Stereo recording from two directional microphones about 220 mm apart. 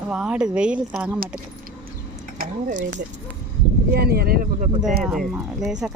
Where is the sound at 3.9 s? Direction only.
45° right (ahead or behind).